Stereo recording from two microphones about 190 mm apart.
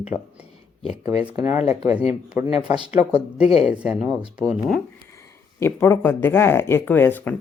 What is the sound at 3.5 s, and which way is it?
Speech, 30° left (ahead or behind).